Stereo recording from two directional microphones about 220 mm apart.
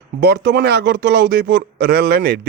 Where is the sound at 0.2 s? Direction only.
50° right (ahead or behind).